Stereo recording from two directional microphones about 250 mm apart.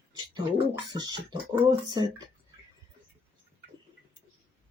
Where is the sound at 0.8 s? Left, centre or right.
Centre.